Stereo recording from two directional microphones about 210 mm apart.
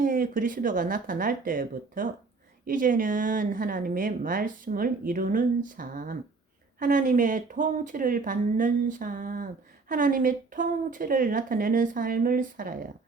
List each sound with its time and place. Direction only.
0.0 s speech: 40° right (ahead or behind)